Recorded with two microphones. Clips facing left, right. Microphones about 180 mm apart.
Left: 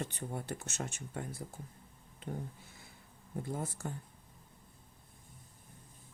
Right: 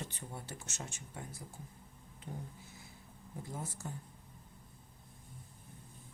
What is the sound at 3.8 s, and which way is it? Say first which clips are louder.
Speech: left 4 dB; 60° left (ahead or behind).